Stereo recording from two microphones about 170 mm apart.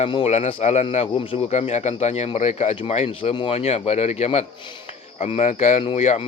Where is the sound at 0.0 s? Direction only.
35° left (ahead or behind).